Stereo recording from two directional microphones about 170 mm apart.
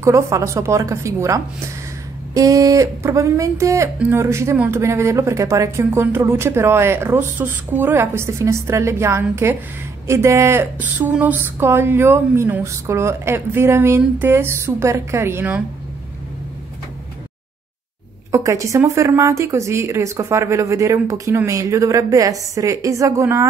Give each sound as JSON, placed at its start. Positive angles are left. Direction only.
{"t": 0.0, "sound": "speech", "side_deg": -15}
{"t": 18.3, "sound": "speech", "side_deg": -20}